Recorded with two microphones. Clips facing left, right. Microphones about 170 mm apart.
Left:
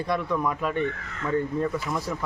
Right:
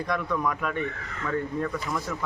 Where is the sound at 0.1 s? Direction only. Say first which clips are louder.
Left 2 dB; 25° left (ahead or behind).